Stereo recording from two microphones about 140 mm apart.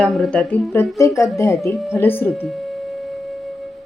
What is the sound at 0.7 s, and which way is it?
A woman's voice, 20° left (ahead or behind).